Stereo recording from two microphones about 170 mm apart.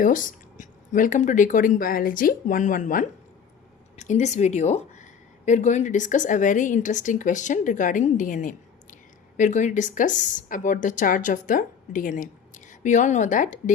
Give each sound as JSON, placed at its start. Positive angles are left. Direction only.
{"t": 0.0, "sound": "a woman's voice", "side_deg": 50}